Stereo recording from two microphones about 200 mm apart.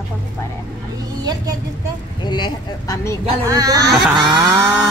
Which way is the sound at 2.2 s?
20° left (ahead or behind).